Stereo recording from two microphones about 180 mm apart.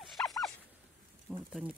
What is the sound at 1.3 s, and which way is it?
Speech, 5° right (ahead or behind).